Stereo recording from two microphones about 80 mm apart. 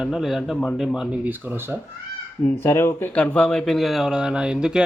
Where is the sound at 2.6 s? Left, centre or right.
Left.